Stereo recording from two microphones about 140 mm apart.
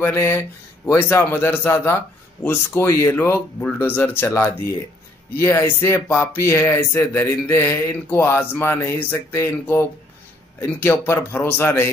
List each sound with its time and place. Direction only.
0.0 s speech: 15° left (ahead or behind)